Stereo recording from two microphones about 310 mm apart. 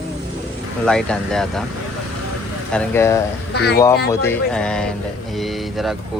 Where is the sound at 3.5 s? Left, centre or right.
Left.